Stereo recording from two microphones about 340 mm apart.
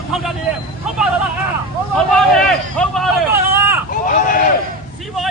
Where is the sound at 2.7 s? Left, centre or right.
Centre.